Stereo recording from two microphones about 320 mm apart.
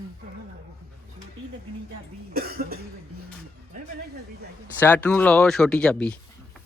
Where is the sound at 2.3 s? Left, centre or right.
Right.